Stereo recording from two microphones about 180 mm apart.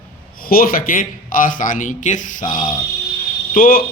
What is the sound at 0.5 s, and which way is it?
Speech, 55° left (ahead or behind).